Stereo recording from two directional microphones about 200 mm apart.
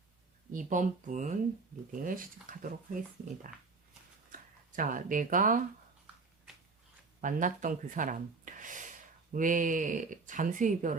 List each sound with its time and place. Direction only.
0.5 s speech: 40° right (ahead or behind)
4.3 s speech: 40° right (ahead or behind)
7.2 s speech: 40° right (ahead or behind)